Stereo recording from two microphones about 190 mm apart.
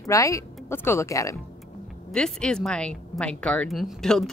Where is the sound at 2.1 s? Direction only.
5° left (ahead or behind).